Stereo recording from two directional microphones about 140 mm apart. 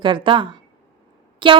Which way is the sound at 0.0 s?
35° right (ahead or behind).